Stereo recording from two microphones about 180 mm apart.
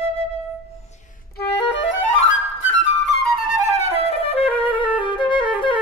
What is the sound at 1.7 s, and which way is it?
Music, 90° left.